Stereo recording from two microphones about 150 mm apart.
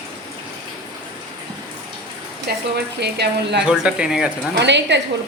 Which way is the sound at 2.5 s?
90° right.